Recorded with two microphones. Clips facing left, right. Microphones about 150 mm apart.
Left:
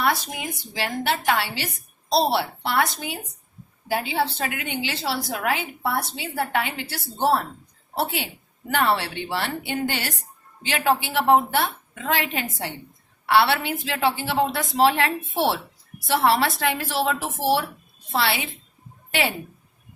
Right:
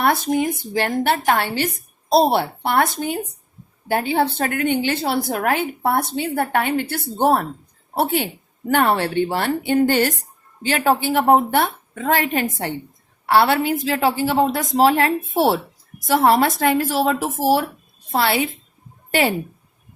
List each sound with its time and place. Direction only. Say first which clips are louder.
0.0 s a woman's voice: right 7 dB; 50° right (ahead or behind)